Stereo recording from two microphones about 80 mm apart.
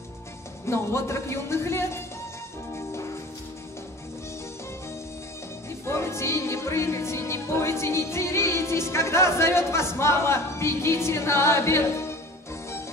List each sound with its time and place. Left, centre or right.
0.7 s speech: left
5.9 s music: left